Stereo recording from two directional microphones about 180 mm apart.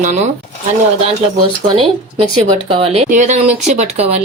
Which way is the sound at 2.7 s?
30° right (ahead or behind).